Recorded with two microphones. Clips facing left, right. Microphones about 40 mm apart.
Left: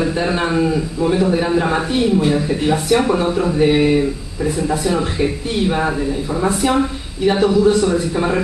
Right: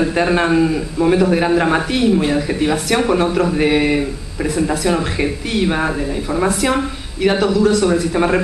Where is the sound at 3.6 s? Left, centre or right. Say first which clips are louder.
Left 3 dB; right.